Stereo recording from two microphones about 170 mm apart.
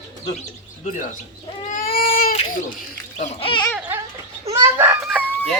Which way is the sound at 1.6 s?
50° left (ahead or behind).